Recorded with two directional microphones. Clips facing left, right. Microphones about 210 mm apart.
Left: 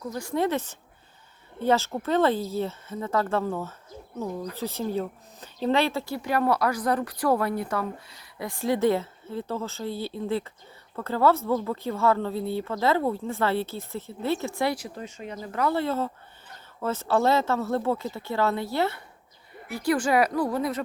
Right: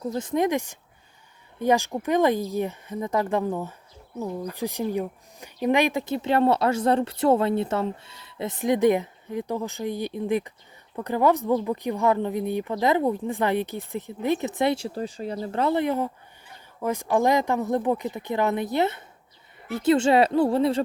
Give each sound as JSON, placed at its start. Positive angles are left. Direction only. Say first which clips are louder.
{"t": 0.0, "sound": "speech", "louder": "right 3 dB", "side_deg": -20}